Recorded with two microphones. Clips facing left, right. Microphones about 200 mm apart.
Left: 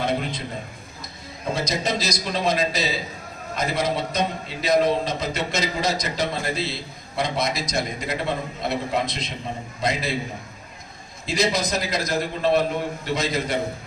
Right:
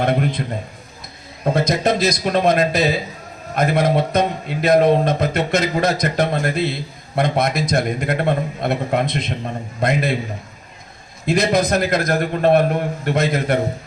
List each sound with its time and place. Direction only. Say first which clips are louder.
0.0 s a man's voice: right 6 dB; 60° right (ahead or behind)
1.5 s a man's voice: right 7 dB; 55° right (ahead or behind)
11.3 s a man's voice: right 6 dB; 55° right (ahead or behind)